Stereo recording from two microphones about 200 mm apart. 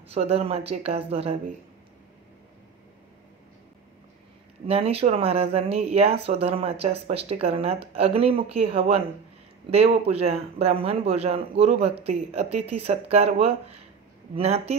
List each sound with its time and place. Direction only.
0.1 s speech: 30° right (ahead or behind)
4.6 s speech: 30° right (ahead or behind)